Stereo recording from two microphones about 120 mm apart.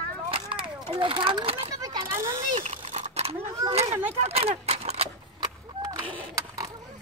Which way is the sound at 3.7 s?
55° right (ahead or behind).